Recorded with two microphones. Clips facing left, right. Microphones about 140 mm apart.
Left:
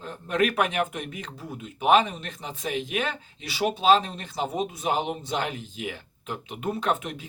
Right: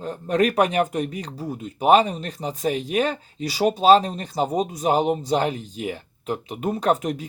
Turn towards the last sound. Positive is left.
turn(degrees=-40)  # may be behind; listen again after turning